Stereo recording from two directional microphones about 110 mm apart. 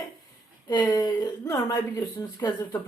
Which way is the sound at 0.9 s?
35° left (ahead or behind).